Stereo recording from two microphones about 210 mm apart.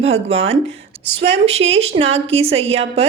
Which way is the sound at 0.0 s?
30° right (ahead or behind).